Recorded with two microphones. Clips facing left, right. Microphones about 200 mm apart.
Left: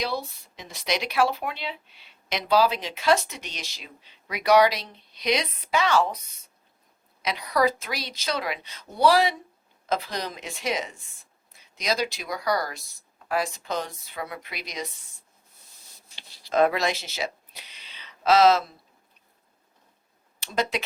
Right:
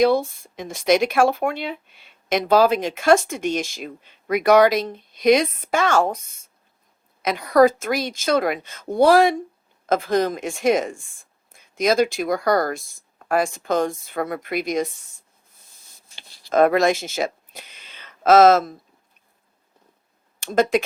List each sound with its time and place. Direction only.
0.0 s speech: 50° right (ahead or behind)
16.0 s a sound: 50° right (ahead or behind)
20.4 s speech: 50° right (ahead or behind)